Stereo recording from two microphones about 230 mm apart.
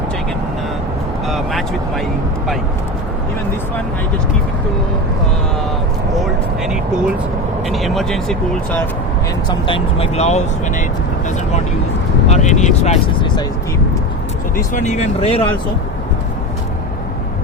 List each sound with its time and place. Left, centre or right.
1.3 s speech: centre
7.7 s speech: centre
9.5 s speech: left
12.3 s speech: left
14.5 s speech: left